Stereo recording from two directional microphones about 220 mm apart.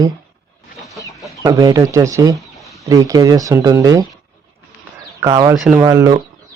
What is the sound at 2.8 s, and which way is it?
Speech, 15° right (ahead or behind).